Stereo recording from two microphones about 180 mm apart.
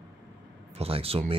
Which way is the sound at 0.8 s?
30° right (ahead or behind).